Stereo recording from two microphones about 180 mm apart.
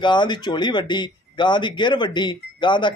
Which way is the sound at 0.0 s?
25° left (ahead or behind).